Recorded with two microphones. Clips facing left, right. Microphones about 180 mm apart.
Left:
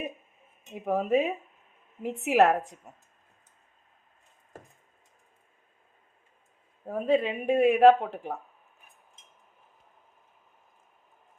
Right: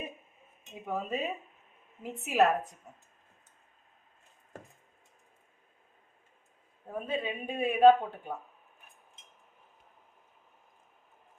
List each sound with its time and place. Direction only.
0.9 s a woman's voice: 70° left (ahead or behind)
6.9 s speech: 80° left